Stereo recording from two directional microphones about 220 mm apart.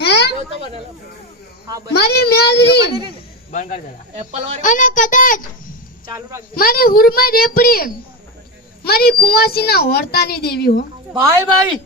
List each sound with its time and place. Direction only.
0.0 s a sound: 50° left (ahead or behind)
0.5 s a sound: 25° right (ahead or behind)
2.0 s a woman's voice: 45° left (ahead or behind)
3.5 s a child's voice: 35° left (ahead or behind)
4.1 s speech: 30° right (ahead or behind)
4.6 s a child's voice: 35° left (ahead or behind)
6.1 s a woman's voice: 15° right (ahead or behind)
6.5 s a child's voice: 40° left (ahead or behind)
11.1 s a woman's voice: 15° right (ahead or behind)